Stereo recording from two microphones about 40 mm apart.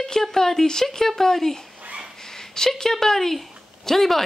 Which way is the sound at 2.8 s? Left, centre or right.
Centre.